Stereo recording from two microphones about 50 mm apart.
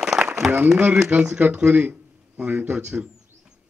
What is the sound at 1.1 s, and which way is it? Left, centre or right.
Speech, right.